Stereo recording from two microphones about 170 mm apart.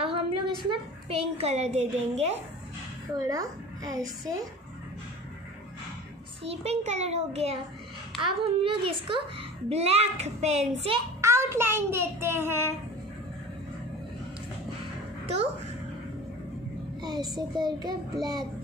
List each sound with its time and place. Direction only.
0.0 s a woman's voice: 30° right (ahead or behind)
3.3 s speech: 20° right (ahead or behind)
6.4 s a child's voice: 40° right (ahead or behind)
11.1 s child singing: 15° right (ahead or behind)
17.0 s speech: 25° right (ahead or behind)